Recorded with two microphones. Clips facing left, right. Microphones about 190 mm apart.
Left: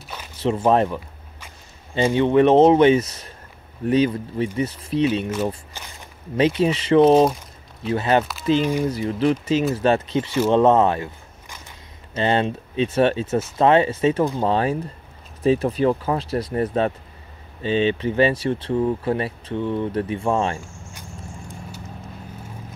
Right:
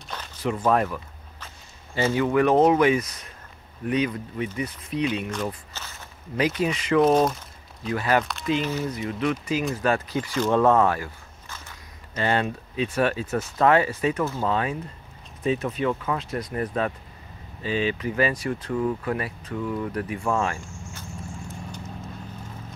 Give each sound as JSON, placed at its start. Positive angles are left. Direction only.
{"t": 0.4, "sound": "speech", "side_deg": 25}
{"t": 5.7, "sound": "walk", "side_deg": 15}
{"t": 6.3, "sound": "speech", "side_deg": 25}
{"t": 14.4, "sound": "speech", "side_deg": 30}